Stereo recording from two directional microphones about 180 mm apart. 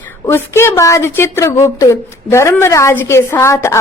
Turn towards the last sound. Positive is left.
turn(degrees=15)  # may be behind; listen again after turning